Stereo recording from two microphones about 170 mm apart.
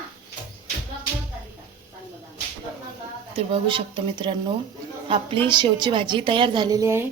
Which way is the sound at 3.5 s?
30° right (ahead or behind).